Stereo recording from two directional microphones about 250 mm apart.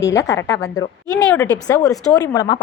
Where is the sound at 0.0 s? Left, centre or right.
Centre.